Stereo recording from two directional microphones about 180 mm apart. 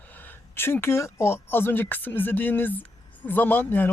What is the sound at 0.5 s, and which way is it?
Speech, 15° left (ahead or behind).